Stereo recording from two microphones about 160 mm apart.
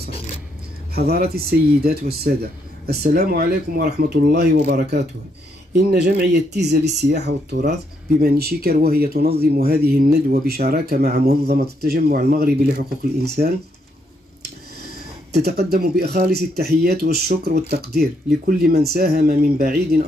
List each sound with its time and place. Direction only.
0.9 s speech: 80° right
8.2 s speech: 70° right (ahead or behind); by 13.5 s 90° right
15.3 s speech: 85° right